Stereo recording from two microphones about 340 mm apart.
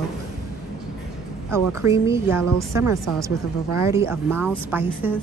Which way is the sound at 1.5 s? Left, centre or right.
Centre.